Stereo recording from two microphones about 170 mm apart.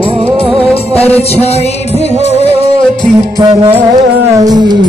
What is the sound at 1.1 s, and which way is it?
Music, 35° left (ahead or behind).